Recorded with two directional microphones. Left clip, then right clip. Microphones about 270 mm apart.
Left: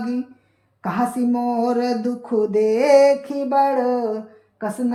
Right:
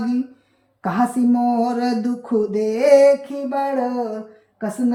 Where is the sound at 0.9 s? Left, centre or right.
Centre.